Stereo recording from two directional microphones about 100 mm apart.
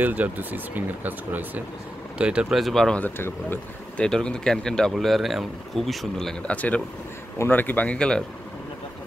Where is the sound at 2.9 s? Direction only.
20° left (ahead or behind).